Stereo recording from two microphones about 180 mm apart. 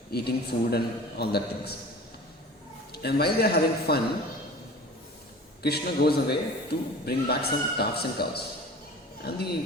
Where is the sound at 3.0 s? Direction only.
60° left (ahead or behind).